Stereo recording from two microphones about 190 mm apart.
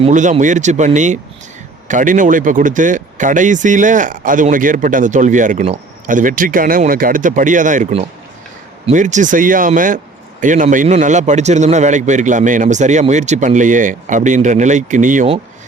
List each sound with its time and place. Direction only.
0.0 s a man's voice: 40° right (ahead or behind)